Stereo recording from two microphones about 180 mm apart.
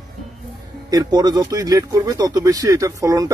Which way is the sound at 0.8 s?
20° right (ahead or behind).